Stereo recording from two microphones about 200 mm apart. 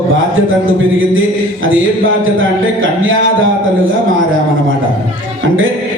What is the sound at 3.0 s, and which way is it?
Speech, 80° right.